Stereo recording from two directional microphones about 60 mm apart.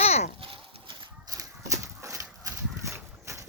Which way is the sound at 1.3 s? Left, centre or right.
Right.